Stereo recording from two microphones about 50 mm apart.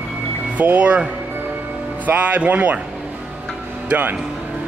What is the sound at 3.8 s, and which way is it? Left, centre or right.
Speech, right.